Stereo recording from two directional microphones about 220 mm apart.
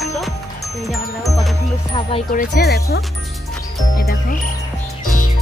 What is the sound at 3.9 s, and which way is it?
Jingle, 40° left (ahead or behind).